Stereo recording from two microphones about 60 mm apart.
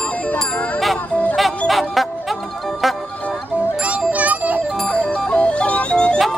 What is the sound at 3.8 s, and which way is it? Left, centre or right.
Music, right.